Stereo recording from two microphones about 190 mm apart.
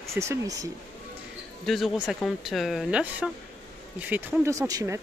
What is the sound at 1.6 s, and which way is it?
Speech, centre (ahead or behind).